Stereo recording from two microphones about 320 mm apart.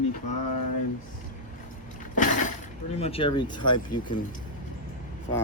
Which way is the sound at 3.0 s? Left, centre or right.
Centre.